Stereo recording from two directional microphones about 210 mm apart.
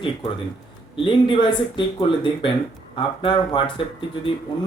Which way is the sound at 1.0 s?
25° left (ahead or behind).